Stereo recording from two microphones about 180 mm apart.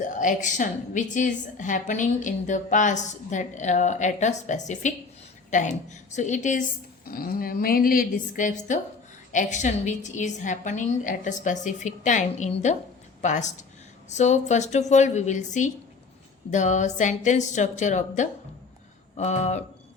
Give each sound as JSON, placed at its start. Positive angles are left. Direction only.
{"t": 0.0, "sound": "a woman's voice", "side_deg": 45}
{"t": 7.1, "sound": "a woman's voice", "side_deg": 55}